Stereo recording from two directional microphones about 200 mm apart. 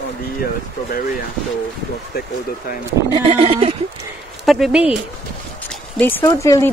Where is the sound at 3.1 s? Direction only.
30° right (ahead or behind).